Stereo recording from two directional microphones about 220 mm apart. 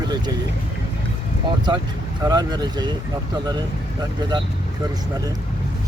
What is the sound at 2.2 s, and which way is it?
Speech, 20° right (ahead or behind).